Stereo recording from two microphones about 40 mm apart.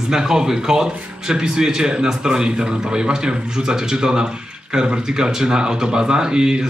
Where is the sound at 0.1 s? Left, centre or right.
Centre.